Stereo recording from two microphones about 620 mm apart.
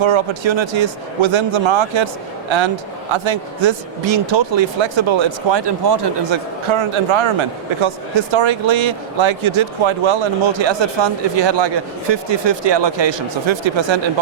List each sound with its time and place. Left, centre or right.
0.0 s speech: right